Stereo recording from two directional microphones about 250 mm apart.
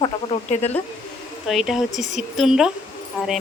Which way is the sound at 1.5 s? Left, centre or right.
Centre.